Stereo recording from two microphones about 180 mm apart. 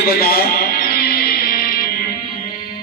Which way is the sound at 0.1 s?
60° left (ahead or behind).